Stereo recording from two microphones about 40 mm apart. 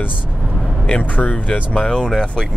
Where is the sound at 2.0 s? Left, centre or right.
Centre.